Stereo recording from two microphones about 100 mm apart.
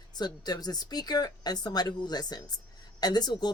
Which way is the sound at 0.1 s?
45° left (ahead or behind).